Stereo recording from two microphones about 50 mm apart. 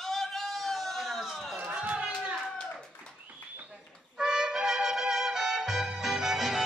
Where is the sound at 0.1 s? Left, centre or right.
Centre.